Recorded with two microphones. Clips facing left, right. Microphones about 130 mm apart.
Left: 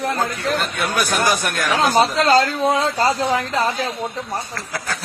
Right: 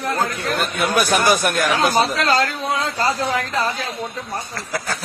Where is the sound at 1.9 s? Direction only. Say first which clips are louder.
Left 3 dB; 25° left (ahead or behind).